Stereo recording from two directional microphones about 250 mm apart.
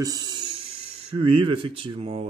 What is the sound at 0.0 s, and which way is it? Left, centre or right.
Music, centre.